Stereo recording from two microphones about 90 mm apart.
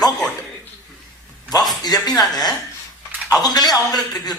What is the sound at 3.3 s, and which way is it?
A man's voice, 45° left (ahead or behind).